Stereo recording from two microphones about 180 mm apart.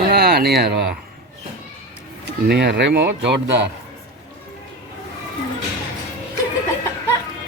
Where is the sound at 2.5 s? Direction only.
70° right (ahead or behind).